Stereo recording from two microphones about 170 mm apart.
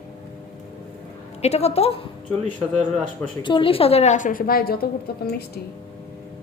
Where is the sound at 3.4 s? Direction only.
30° left (ahead or behind); by 5.6 s 70° left (ahead or behind).